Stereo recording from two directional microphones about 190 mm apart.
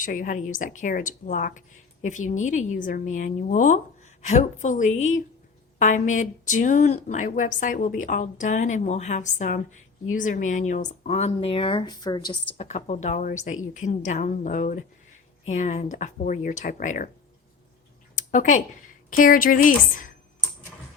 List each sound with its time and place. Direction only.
0.0 s a woman's voice: 45° left (ahead or behind); by 12.4 s 20° left (ahead or behind)
12.5 s speech: 35° left (ahead or behind)
18.2 s a sound: 40° left (ahead or behind)
19.1 s a woman's voice: 45° left (ahead or behind)